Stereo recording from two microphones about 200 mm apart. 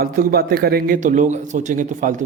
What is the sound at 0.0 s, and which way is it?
Speech, 45° right (ahead or behind).